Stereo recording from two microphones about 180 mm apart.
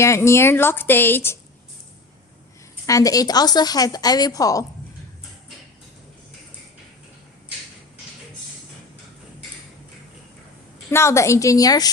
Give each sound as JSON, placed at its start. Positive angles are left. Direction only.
{"t": 0.0, "sound": "a woman's voice", "side_deg": 15}
{"t": 2.8, "sound": "a woman's voice", "side_deg": 20}
{"t": 10.9, "sound": "a woman's voice", "side_deg": 15}